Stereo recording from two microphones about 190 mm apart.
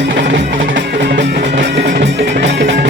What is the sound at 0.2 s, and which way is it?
Music, 65° right (ahead or behind).